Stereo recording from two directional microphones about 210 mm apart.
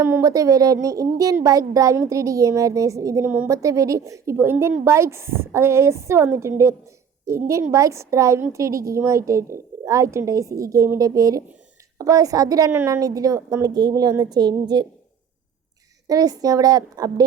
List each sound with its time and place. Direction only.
0.0 s a woman's voice: 15° right (ahead or behind)
16.0 s a woman's voice: 15° right (ahead or behind)